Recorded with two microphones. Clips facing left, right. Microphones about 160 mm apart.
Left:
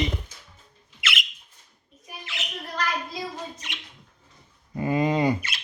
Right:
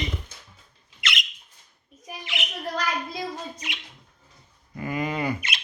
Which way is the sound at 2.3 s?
20° right (ahead or behind).